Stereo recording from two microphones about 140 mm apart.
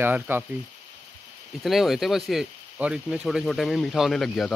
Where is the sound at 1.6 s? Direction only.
Centre (ahead or behind).